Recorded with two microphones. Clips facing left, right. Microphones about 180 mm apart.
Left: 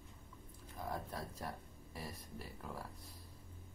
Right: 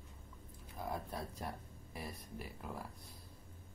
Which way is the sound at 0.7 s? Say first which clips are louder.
Right 1 dB; 10° right (ahead or behind).